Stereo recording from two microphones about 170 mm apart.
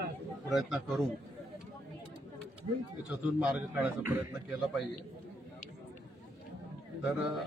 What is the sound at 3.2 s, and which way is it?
A man's voice, 10° right (ahead or behind).